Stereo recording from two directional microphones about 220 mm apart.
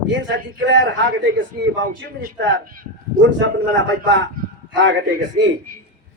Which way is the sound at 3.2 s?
60° right (ahead or behind).